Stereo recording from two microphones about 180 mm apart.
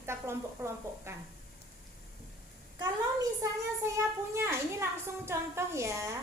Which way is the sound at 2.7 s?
20° right (ahead or behind).